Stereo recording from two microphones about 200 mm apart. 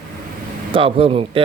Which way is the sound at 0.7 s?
25° right (ahead or behind).